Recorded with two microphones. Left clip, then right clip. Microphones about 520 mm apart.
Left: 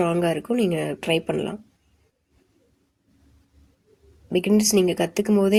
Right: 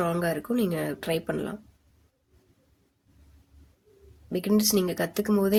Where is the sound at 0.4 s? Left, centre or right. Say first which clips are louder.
Left 5 dB; right.